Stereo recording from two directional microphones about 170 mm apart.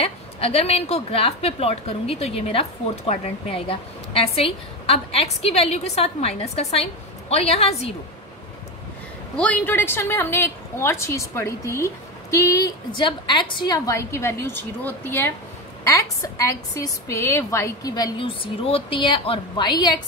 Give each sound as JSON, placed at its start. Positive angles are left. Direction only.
{"t": 0.0, "sound": "a woman's voice", "side_deg": 35}
{"t": 9.4, "sound": "a woman's voice", "side_deg": 10}